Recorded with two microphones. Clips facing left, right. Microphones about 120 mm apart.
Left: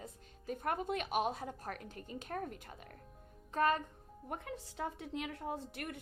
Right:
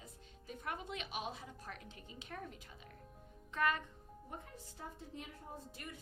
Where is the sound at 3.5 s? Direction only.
35° left (ahead or behind).